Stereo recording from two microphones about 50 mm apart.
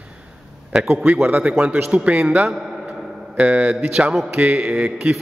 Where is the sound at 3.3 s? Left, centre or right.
Right.